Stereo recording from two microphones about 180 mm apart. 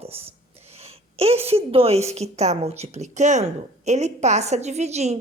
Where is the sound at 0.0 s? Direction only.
35° right (ahead or behind).